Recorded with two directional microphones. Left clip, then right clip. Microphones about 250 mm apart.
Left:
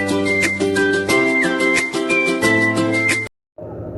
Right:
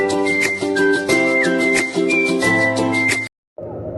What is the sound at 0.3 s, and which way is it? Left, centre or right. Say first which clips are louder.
Music: even; centre.